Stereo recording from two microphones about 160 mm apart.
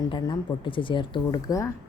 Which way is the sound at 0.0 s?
25° left (ahead or behind).